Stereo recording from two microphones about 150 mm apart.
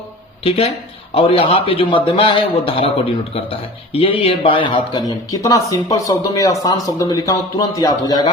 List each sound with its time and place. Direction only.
0.4 s a man's voice: 40° left (ahead or behind)